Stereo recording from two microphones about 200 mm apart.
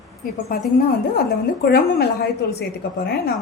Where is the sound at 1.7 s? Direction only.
50° left (ahead or behind).